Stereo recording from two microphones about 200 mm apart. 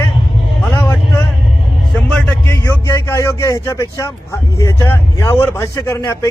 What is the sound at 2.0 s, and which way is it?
Music, 5° left (ahead or behind).